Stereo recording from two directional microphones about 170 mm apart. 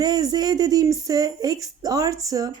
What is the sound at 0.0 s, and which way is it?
Speech, 25° right (ahead or behind).